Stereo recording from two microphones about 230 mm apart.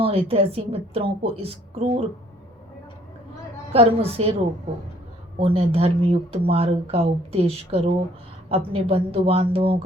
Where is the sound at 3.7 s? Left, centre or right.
Right.